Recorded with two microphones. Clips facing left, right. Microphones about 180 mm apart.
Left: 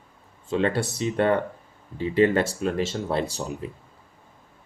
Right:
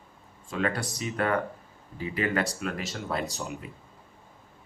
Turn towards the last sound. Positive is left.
turn(degrees=30)  # may be behind; listen again after turning